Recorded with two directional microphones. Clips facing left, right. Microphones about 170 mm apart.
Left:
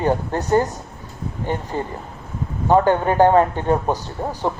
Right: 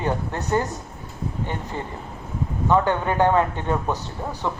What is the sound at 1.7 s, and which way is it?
Speech, 35° left (ahead or behind).